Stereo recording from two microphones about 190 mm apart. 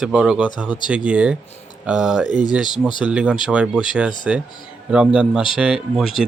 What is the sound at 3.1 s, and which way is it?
Speech, 5° right (ahead or behind).